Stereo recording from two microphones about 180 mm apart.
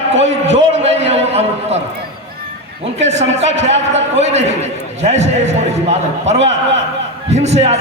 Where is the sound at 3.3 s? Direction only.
40° right (ahead or behind).